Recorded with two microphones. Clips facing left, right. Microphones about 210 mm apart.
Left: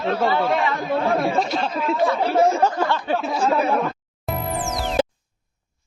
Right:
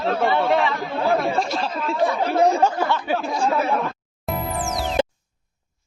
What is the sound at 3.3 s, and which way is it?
Speech, 10° left (ahead or behind).